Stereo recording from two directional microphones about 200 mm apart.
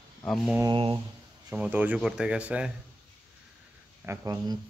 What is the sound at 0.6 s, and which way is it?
Speech, 25° right (ahead or behind).